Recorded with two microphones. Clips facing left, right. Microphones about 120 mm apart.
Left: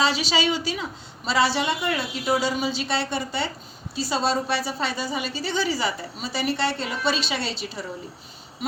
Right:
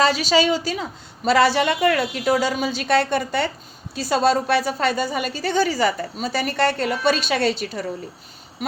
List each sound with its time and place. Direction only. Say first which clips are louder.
0.0 s a woman's voice: right 5 dB; 45° right (ahead or behind)